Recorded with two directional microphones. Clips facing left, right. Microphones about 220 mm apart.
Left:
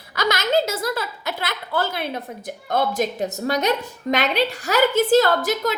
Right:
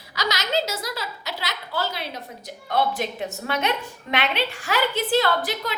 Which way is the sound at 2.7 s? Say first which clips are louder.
Left 3 dB; 40° left (ahead or behind).